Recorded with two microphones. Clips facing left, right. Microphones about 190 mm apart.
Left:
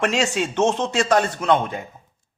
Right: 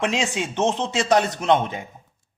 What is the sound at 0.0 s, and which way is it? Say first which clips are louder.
A man's voice: left 3 dB; 15° right (ahead or behind).